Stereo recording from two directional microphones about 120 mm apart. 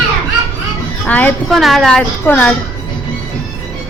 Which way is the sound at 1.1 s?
15° left (ahead or behind).